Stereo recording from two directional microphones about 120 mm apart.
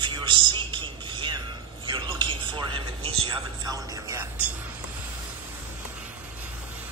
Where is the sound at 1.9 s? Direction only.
40° right (ahead or behind).